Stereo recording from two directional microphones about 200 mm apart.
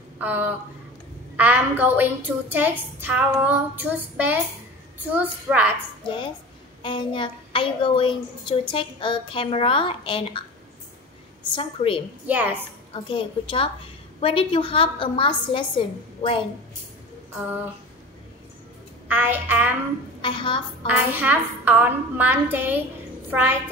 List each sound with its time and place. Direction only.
0.2 s a woman's voice: 10° right (ahead or behind)
6.0 s a woman's voice: 25° left (ahead or behind)
11.5 s a woman's voice: 25° left (ahead or behind)
12.3 s a woman's voice: 10° right (ahead or behind)
12.9 s a woman's voice: 25° left (ahead or behind)
19.0 s a woman's voice: 10° right (ahead or behind)
20.2 s a woman's voice: 25° left (ahead or behind)
20.8 s a woman's voice: 10° right (ahead or behind)